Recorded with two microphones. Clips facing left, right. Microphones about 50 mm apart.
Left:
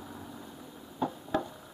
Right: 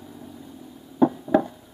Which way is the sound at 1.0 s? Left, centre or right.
Right.